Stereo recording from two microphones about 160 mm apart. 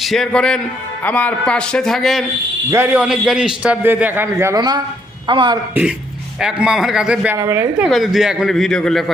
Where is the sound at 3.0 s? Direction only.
Centre (ahead or behind).